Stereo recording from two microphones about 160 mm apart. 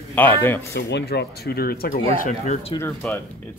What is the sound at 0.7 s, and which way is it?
Speech, 90° left.